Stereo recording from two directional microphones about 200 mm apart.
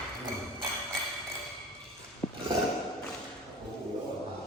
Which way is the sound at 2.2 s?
15° left (ahead or behind).